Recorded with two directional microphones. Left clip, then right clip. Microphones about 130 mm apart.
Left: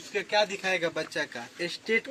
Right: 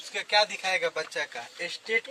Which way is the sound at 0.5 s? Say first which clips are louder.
Right 1 dB; 20° right (ahead or behind).